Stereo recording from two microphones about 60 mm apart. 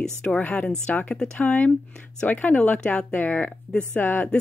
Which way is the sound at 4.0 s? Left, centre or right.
Left.